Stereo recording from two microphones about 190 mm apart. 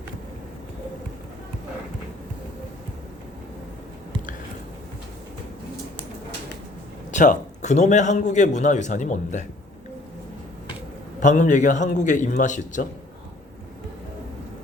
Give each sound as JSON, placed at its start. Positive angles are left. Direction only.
{"t": 7.1, "sound": "a man's voice", "side_deg": 40}
{"t": 11.2, "sound": "a man's voice", "side_deg": 40}